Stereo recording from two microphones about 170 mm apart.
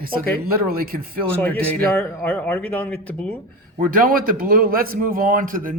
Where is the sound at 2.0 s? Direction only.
10° left (ahead or behind).